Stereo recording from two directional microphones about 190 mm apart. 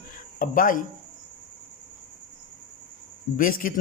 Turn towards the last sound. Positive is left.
turn(degrees=45)  # may be behind; listen again after turning